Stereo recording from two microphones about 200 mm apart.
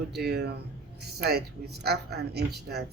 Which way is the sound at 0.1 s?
55° right (ahead or behind).